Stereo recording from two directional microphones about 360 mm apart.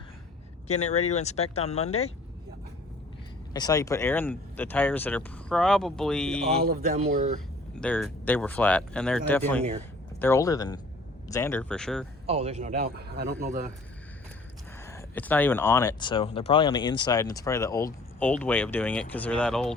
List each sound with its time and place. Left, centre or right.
0.7 s speech: centre
3.5 s speech: centre
6.5 s a man's voice: centre
7.8 s speech: centre
12.2 s a man's voice: centre
14.8 s speech: centre